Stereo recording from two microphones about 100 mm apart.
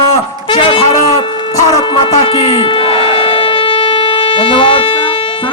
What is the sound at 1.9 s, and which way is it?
Wind instrument, 75° left (ahead or behind).